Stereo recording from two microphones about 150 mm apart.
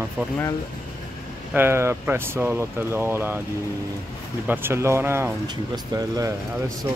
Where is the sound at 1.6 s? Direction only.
15° right (ahead or behind).